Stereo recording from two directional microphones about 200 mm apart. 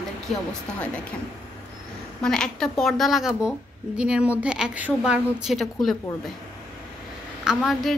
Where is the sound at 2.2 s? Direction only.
5° left (ahead or behind).